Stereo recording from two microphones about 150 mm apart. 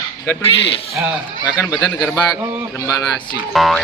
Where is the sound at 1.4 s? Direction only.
10° right (ahead or behind).